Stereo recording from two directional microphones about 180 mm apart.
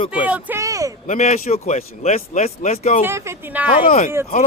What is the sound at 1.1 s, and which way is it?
Speech, 40° left (ahead or behind).